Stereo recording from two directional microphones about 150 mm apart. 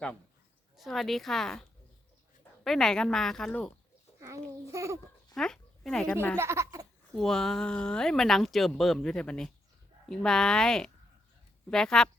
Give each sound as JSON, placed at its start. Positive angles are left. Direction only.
{"t": 0.8, "sound": "speech", "side_deg": 0}
{"t": 2.6, "sound": "speech", "side_deg": 5}
{"t": 4.2, "sound": "a child's voice", "side_deg": -20}
{"t": 5.3, "sound": "speech", "side_deg": 5}
{"t": 6.3, "sound": "speech", "side_deg": -15}
{"t": 7.2, "sound": "speech", "side_deg": 0}